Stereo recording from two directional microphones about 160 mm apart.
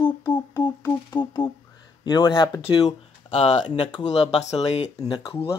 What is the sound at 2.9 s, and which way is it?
Speech, 40° left (ahead or behind).